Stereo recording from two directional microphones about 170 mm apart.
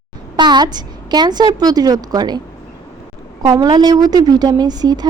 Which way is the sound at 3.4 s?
20° right (ahead or behind).